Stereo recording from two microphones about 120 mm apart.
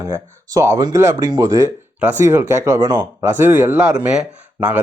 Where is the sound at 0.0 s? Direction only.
25° right (ahead or behind).